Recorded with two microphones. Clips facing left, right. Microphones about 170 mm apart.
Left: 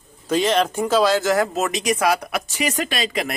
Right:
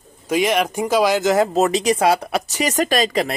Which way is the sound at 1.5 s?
30° right (ahead or behind).